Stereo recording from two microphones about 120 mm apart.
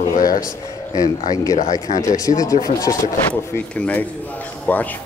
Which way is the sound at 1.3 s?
30° left (ahead or behind).